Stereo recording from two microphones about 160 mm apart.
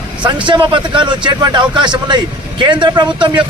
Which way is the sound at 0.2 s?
30° right (ahead or behind).